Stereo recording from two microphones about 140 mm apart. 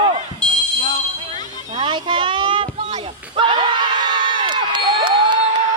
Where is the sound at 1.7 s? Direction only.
35° right (ahead or behind).